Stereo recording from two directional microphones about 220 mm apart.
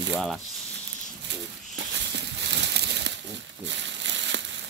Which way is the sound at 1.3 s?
50° right (ahead or behind).